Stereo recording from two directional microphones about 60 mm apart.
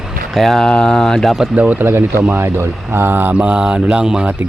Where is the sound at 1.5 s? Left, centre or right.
Right.